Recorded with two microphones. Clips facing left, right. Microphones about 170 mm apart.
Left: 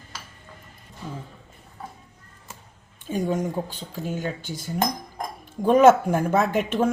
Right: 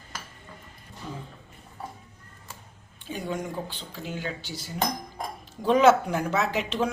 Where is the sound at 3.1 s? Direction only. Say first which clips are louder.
Left 7 dB; 45° left (ahead or behind).